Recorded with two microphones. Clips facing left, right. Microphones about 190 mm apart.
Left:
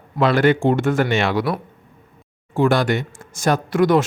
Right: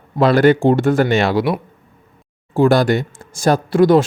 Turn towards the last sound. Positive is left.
turn(degrees=-30)  # may be behind; listen again after turning